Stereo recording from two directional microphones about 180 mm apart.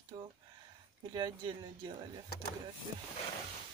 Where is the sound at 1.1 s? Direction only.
25° right (ahead or behind).